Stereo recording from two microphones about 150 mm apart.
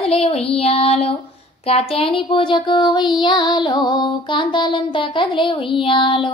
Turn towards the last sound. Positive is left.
turn(degrees=35)  # may be behind; listen again after turning